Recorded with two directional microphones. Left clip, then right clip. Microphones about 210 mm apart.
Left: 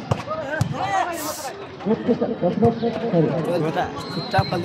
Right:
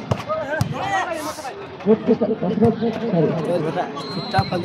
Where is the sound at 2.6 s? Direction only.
30° right (ahead or behind).